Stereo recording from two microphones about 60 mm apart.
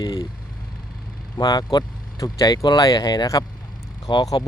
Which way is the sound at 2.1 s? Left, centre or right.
Left.